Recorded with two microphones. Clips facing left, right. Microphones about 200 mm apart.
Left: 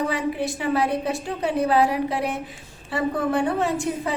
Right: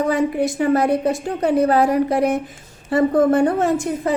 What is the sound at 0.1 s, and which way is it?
A woman's voice, 45° right (ahead or behind).